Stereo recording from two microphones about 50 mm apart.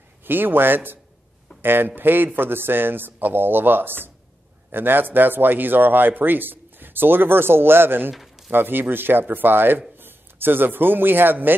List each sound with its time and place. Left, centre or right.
0.2 s speech: right
8.1 s a sound: centre
8.5 s speech: right